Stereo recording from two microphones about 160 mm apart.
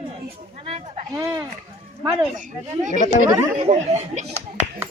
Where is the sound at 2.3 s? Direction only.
55° right (ahead or behind).